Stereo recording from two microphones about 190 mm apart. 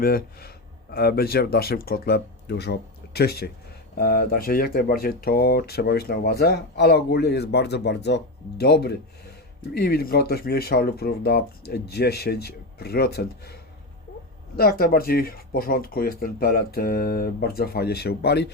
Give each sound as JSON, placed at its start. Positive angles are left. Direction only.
{"t": 0.0, "sound": "speech", "side_deg": 50}